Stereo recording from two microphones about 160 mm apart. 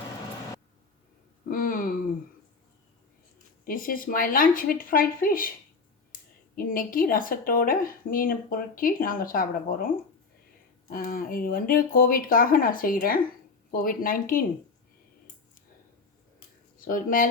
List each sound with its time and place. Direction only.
1.5 s a sound: 60° left (ahead or behind)
3.6 s speech: 60° left (ahead or behind)
6.6 s speech: 60° left (ahead or behind)
10.8 s speech: 65° left (ahead or behind)
16.8 s speech: 60° left (ahead or behind)